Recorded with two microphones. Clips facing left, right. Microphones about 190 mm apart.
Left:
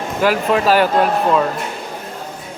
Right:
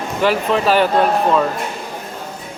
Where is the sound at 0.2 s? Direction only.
10° left (ahead or behind).